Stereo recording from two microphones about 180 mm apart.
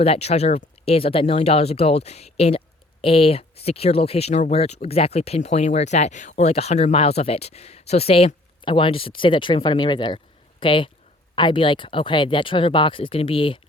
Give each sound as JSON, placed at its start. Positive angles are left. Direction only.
{"t": 0.0, "sound": "speech", "side_deg": 35}